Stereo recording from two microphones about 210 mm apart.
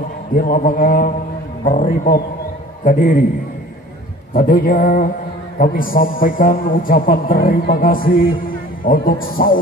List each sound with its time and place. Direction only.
0.4 s a man's voice: 40° left (ahead or behind)
4.3 s a man's voice: 40° left (ahead or behind)